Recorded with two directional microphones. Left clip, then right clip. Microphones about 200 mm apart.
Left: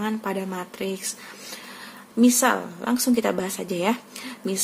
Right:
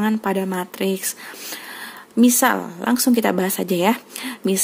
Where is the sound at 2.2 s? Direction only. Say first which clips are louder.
Right 3 dB; 45° right (ahead or behind).